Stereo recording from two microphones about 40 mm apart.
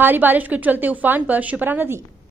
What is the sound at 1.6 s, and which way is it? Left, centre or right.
Speech, right.